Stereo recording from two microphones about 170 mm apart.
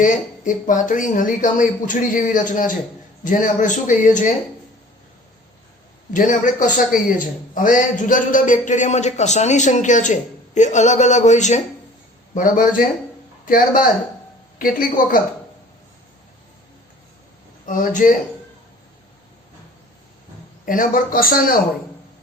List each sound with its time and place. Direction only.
0.0 s a man's voice: 50° left (ahead or behind)
6.1 s a man's voice: 50° left (ahead or behind)
17.7 s a man's voice: 50° left (ahead or behind)
20.7 s speech: 55° left (ahead or behind)